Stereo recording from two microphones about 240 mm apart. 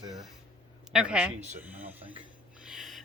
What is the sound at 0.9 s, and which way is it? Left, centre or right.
Speech, centre.